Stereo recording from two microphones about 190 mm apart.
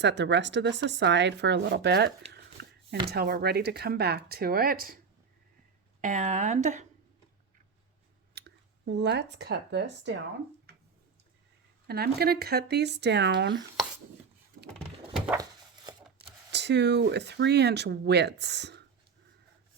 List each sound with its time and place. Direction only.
0.0 s speech: 65° right (ahead or behind)
2.3 s a sound: 60° right (ahead or behind)
3.1 s speech: 55° right (ahead or behind)
6.0 s a woman's voice: 40° right (ahead or behind)
8.4 s speech: 65° right (ahead or behind)
11.9 s speech: 55° right (ahead or behind)
14.7 s a sound: 5° left (ahead or behind)
16.5 s speech: 65° right (ahead or behind)